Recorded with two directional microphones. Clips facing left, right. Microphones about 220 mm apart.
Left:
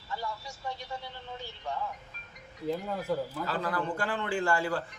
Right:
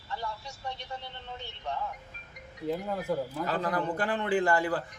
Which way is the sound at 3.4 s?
20° right (ahead or behind).